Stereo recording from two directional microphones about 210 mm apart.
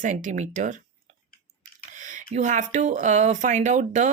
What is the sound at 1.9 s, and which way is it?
Speech, 35° right (ahead or behind).